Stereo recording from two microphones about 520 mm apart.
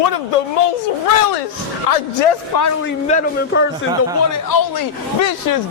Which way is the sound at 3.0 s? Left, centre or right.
Centre.